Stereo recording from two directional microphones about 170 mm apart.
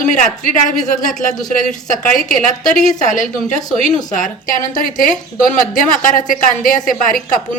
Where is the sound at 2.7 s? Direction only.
50° left (ahead or behind).